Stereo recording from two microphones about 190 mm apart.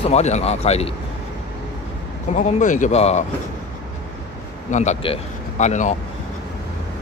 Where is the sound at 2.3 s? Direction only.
40° left (ahead or behind).